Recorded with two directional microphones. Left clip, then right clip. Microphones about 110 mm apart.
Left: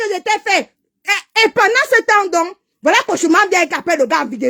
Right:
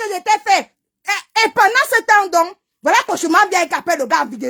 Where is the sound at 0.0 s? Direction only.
25° left (ahead or behind).